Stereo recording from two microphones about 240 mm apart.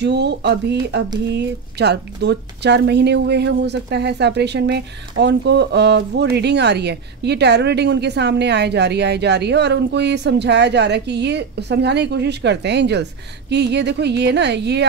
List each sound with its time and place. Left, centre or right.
0.0 s speech: right